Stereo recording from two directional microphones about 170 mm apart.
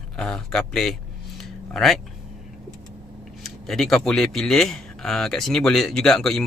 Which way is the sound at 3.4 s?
Centre (ahead or behind).